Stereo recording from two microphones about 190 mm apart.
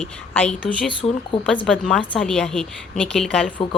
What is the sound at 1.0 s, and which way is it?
Speech, 25° left (ahead or behind).